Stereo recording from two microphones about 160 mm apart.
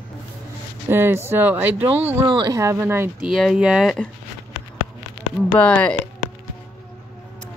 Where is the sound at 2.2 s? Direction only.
25° right (ahead or behind).